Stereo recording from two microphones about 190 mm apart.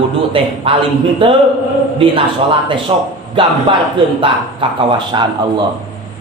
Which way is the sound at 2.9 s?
25° right (ahead or behind).